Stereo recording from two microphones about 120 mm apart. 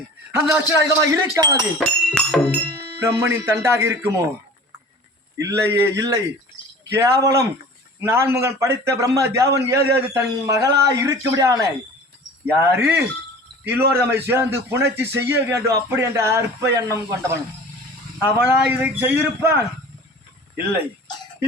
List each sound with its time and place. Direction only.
0.3 s a man's voice: 20° right (ahead or behind)
1.8 s music: 10° left (ahead or behind)
3.0 s a man's voice: 20° right (ahead or behind)
5.4 s a man's voice: 25° right (ahead or behind)
12.7 s a man's voice: 15° right (ahead or behind)
18.3 s a man's voice: 20° right (ahead or behind)